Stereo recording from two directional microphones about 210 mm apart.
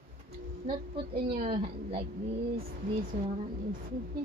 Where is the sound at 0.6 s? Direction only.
25° right (ahead or behind).